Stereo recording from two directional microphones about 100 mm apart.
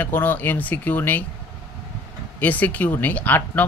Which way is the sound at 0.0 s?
20° left (ahead or behind).